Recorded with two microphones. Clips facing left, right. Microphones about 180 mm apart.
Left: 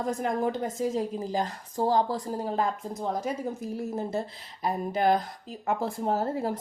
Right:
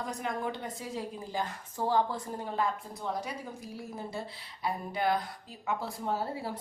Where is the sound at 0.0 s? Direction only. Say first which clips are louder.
Left 7 dB; 45° left (ahead or behind).